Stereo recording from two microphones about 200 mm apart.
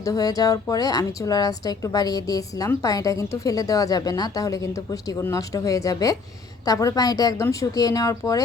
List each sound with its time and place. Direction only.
0.0 s a woman's voice: 20° left (ahead or behind)